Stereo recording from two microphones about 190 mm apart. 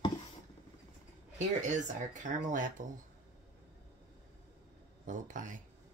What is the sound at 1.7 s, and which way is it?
Speech, 40° right (ahead or behind).